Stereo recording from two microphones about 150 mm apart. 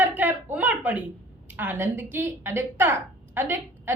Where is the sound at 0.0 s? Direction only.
10° right (ahead or behind).